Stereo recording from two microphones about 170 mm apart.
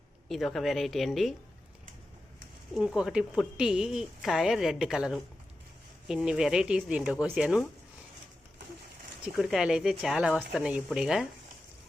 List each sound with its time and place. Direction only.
0.3 s a woman's voice: centre (ahead or behind)
2.7 s a woman's voice: 5° right (ahead or behind)
9.2 s a woman's voice: centre (ahead or behind)